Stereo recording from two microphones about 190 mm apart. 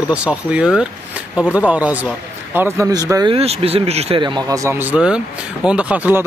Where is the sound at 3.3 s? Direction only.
30° right (ahead or behind); by 6.2 s 10° right (ahead or behind).